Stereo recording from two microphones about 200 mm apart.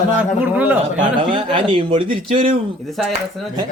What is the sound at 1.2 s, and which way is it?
Speech, 25° right (ahead or behind).